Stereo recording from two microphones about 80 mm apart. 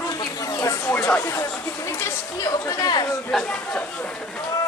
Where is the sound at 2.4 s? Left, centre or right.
Left.